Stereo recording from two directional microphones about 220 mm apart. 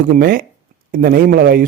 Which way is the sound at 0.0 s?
40° right (ahead or behind).